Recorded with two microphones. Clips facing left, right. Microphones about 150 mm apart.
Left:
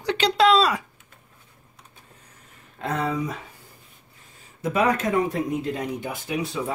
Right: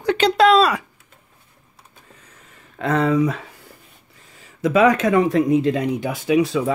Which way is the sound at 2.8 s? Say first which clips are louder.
Right 8 dB; 90° right.